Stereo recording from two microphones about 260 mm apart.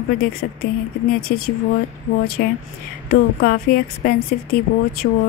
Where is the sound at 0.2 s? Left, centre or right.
Left.